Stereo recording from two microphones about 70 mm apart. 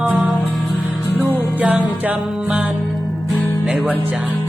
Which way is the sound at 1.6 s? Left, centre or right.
Centre.